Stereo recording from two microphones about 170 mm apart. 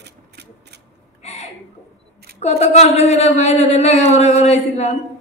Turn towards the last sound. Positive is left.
turn(degrees=40)  # may be behind; listen again after turning